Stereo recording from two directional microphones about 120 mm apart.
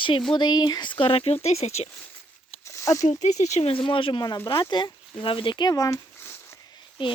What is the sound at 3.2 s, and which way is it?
Speech, 75° left (ahead or behind).